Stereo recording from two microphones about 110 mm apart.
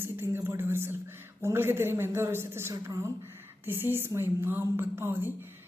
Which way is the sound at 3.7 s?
20° right (ahead or behind).